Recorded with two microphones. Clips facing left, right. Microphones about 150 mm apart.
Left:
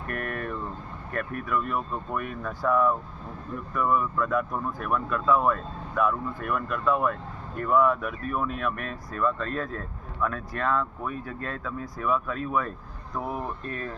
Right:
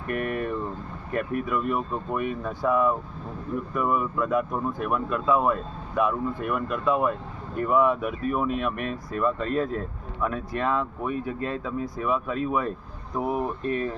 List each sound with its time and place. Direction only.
0.1 s speech: 10° right (ahead or behind)